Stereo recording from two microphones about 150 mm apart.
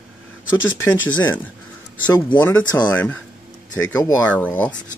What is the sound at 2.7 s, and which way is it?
Speech, 15° left (ahead or behind).